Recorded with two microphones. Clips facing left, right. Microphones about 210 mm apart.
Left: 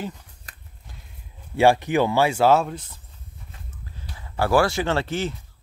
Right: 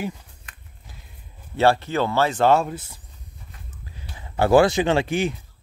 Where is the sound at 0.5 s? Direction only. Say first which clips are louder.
Left 1 dB; 40° left (ahead or behind).